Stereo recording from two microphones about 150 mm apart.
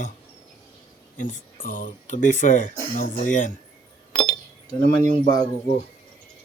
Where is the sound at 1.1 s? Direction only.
65° left (ahead or behind).